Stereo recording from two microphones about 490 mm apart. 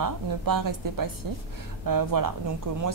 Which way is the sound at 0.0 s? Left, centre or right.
Right.